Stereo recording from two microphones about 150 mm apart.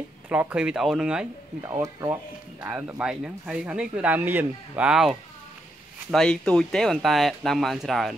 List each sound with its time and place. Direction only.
0.3 s speech: 10° right (ahead or behind)
1.6 s speech: 20° right (ahead or behind); by 5.1 s 5° right (ahead or behind)
6.1 s speech: 5° left (ahead or behind)